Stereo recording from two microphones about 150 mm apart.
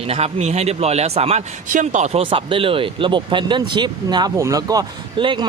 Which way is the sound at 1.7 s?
55° right (ahead or behind).